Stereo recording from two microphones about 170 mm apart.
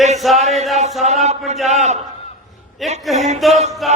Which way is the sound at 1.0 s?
40° right (ahead or behind).